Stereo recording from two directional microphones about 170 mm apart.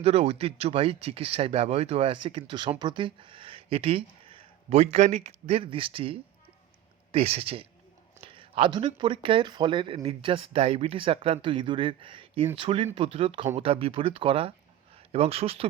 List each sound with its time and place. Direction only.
0.0 s speech: 35° right (ahead or behind)